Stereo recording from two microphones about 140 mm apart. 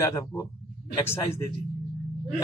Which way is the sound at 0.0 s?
25° left (ahead or behind).